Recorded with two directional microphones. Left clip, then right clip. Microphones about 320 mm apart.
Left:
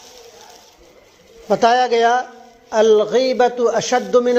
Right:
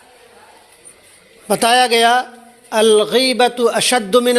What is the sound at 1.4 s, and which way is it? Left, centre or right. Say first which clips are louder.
Speech: right 1 dB; right.